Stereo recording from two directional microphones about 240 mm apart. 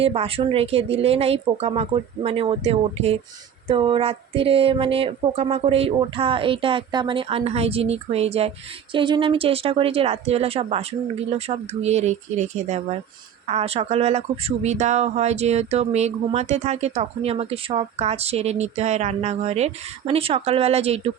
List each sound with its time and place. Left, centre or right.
0.0 s a woman's voice: right